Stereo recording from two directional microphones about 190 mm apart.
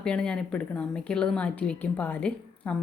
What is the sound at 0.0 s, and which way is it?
A woman's voice, 5° left (ahead or behind).